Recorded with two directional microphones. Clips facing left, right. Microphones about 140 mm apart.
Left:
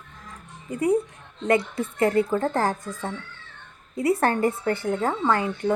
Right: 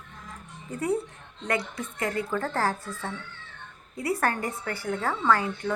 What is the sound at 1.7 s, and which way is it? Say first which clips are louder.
Speech: left 9 dB; 25° left (ahead or behind).